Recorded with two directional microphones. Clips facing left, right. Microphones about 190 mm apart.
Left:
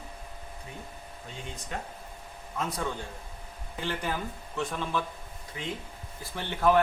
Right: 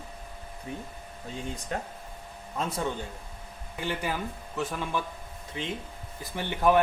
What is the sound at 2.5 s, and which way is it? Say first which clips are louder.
Speech: right 2 dB; 25° right (ahead or behind).